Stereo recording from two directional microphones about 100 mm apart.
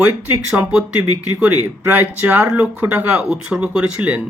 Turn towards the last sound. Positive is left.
turn(degrees=-15)  # may be behind; listen again after turning